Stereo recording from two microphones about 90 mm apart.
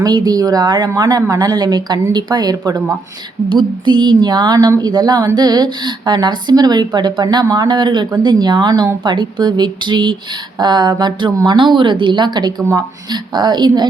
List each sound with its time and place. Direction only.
0.0 s speech: 50° right (ahead or behind)
3.5 s a woman's voice: 60° right (ahead or behind)